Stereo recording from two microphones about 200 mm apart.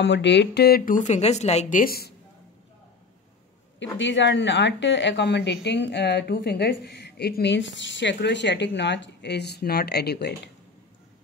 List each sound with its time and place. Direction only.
0.0 s speech: 65° left (ahead or behind)
4.0 s a woman's voice: 65° left (ahead or behind)